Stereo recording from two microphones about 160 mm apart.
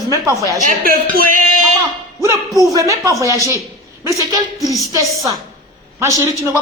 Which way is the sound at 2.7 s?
20° right (ahead or behind).